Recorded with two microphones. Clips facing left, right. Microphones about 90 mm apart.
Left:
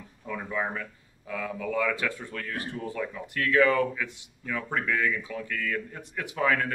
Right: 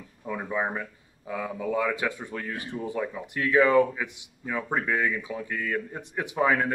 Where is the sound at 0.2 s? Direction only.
20° right (ahead or behind).